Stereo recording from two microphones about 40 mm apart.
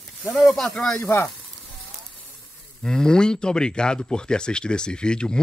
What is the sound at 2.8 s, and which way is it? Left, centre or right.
Speech, centre.